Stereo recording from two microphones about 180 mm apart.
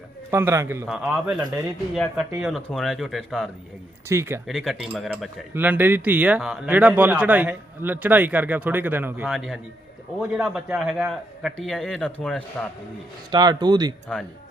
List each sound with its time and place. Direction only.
0.3 s speech: 15° right (ahead or behind)
0.9 s a man's voice: 5° right (ahead or behind)
2.4 s a man's voice: centre (ahead or behind)
4.1 s speech: 15° right (ahead or behind)
4.4 s a man's voice: centre (ahead or behind)
5.5 s speech: 10° right (ahead or behind)
9.3 s a man's voice: centre (ahead or behind)
13.3 s speech: 25° right (ahead or behind)